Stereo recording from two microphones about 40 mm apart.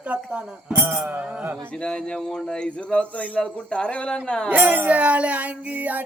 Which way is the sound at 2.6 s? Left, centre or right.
Left.